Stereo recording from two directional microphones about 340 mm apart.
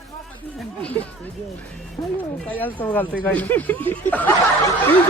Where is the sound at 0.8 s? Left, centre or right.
Centre.